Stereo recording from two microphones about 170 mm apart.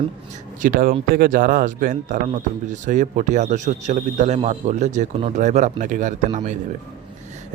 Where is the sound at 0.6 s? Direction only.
55° right (ahead or behind).